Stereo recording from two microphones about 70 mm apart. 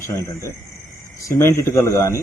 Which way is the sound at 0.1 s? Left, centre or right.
Left.